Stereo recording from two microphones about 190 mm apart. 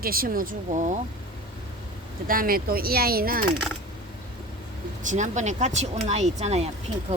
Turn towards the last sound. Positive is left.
turn(degrees=-35)  # may be behind; listen again after turning